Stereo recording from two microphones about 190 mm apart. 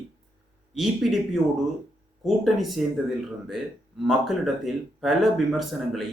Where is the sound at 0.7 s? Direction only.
Centre (ahead or behind).